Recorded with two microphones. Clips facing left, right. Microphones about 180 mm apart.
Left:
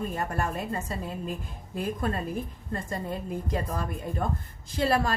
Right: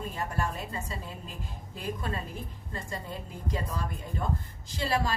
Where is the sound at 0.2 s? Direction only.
50° left (ahead or behind).